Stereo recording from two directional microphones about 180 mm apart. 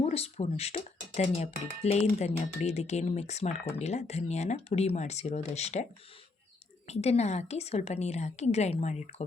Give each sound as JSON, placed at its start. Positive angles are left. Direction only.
{"t": 0.0, "sound": "speech", "side_deg": 35}
{"t": 6.8, "sound": "speech", "side_deg": 35}